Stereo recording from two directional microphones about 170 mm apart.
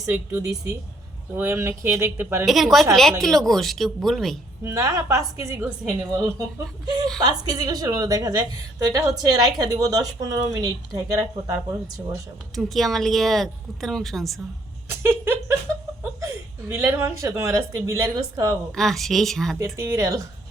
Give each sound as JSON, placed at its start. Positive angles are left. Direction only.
{"t": 0.0, "sound": "a woman's voice", "side_deg": -10}
{"t": 2.4, "sound": "a woman's voice", "side_deg": 0}
{"t": 4.6, "sound": "a woman's voice", "side_deg": -15}
{"t": 12.5, "sound": "a woman's voice", "side_deg": 0}
{"t": 14.8, "sound": "a sound", "side_deg": -15}
{"t": 16.2, "sound": "a woman's voice", "side_deg": -15}
{"t": 18.7, "sound": "a woman's voice", "side_deg": 0}
{"t": 19.5, "sound": "a woman's voice", "side_deg": -15}